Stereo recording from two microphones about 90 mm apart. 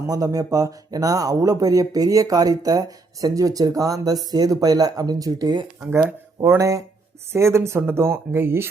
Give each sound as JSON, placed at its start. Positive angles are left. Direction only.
{"t": 0.1, "sound": "speech", "side_deg": -40}
{"t": 6.4, "sound": "speech", "side_deg": -35}